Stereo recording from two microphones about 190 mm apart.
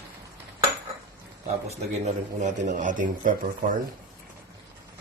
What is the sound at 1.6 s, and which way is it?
A man's voice, 35° right (ahead or behind).